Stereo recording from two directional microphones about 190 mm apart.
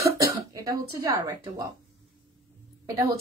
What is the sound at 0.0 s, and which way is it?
Cough, 15° right (ahead or behind).